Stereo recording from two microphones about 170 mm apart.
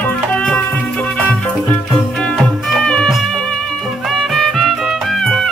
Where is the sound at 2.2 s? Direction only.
5° left (ahead or behind).